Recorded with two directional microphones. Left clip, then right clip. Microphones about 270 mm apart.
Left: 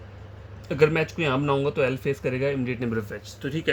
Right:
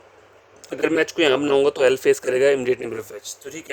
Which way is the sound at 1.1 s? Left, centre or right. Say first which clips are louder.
Right 7 dB; right.